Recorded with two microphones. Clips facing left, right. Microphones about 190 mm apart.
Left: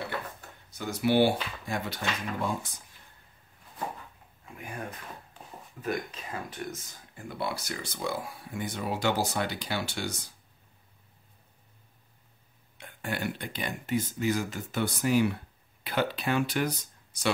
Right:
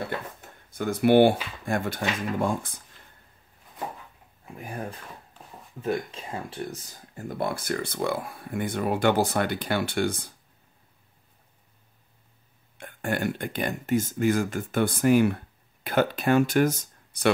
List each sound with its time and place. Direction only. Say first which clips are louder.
0.7 s speech: right 6 dB; 55° right (ahead or behind)
5.8 s speech: right 4 dB; 25° right (ahead or behind); by 10.3 s 55° right (ahead or behind)
12.7 s speech: right 6 dB; 50° right (ahead or behind)